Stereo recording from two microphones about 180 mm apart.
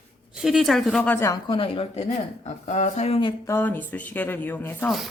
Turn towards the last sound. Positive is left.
turn(degrees=10)  # may be behind; listen again after turning